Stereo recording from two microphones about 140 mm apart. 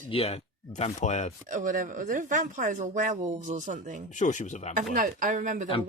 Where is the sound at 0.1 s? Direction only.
45° left (ahead or behind).